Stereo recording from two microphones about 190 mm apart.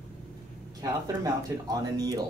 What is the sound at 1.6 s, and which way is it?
Speech, 20° right (ahead or behind).